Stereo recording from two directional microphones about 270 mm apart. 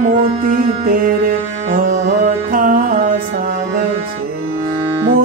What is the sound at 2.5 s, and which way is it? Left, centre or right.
Music, right.